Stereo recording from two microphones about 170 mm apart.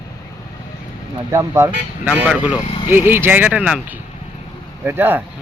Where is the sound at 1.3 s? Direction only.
20° right (ahead or behind).